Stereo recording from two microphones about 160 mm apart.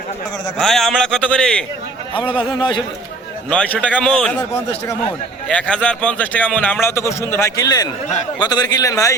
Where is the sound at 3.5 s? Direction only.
10° left (ahead or behind).